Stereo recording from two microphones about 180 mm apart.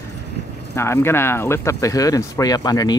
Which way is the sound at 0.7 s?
15° left (ahead or behind).